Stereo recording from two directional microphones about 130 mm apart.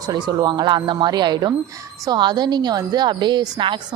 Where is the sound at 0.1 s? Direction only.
30° right (ahead or behind).